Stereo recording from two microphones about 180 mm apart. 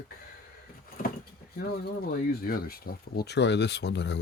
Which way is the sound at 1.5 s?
60° left (ahead or behind).